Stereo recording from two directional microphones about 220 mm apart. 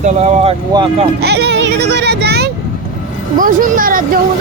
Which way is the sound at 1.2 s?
50° right (ahead or behind).